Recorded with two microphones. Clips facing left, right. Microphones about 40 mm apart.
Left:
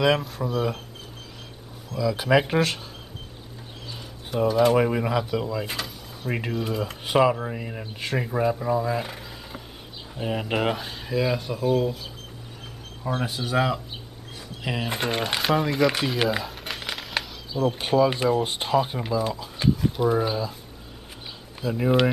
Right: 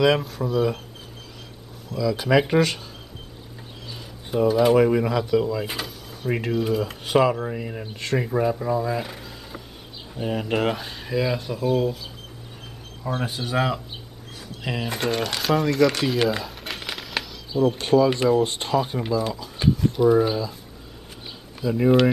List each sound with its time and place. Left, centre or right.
0.0 s speech: centre
2.0 s speech: centre
3.9 s a sound: centre
4.7 s speech: centre
14.9 s speech: left
16.0 s a sound: centre
17.7 s speech: centre
21.7 s speech: centre